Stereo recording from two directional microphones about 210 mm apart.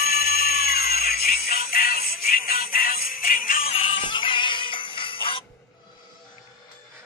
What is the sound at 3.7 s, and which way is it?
Music, 25° left (ahead or behind).